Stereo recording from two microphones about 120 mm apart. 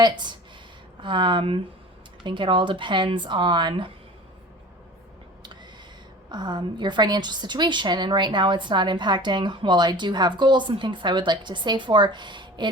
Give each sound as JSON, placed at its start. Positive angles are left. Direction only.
{"t": 0.0, "sound": "a woman's voice", "side_deg": -35}
{"t": 6.2, "sound": "a woman's voice", "side_deg": -35}